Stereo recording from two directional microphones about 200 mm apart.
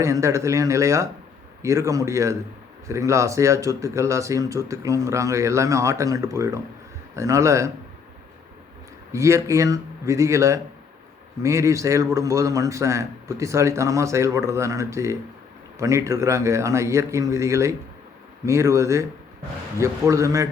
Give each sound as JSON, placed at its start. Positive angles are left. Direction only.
{"t": 0.0, "sound": "speech", "side_deg": -15}
{"t": 9.1, "sound": "speech", "side_deg": -15}